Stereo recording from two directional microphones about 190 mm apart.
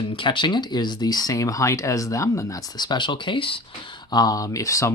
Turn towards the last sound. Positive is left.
turn(degrees=15)  # may be behind; listen again after turning